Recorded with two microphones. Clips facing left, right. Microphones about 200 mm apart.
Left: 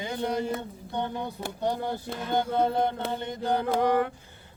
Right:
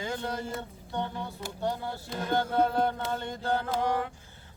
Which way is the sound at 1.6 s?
20° left (ahead or behind).